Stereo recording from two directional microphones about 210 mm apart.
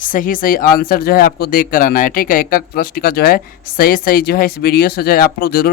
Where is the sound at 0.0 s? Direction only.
40° left (ahead or behind).